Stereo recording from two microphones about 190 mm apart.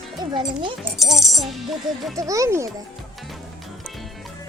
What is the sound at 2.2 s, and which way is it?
Speech, 15° right (ahead or behind).